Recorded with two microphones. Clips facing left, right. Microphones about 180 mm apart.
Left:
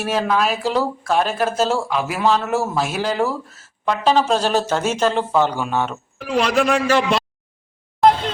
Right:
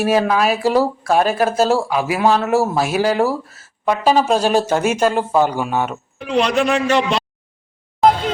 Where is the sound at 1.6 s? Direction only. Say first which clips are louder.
Right 4 dB; 40° right (ahead or behind).